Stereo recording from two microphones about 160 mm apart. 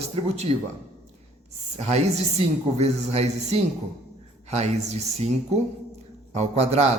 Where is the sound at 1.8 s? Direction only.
45° right (ahead or behind).